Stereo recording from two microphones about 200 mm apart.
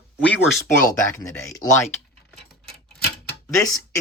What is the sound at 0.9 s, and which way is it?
Speech, 15° left (ahead or behind).